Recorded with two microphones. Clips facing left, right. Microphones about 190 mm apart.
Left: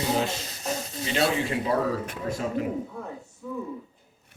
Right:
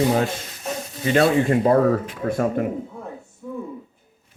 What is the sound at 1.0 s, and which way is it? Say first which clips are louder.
Speech: right 8 dB; 55° right (ahead or behind).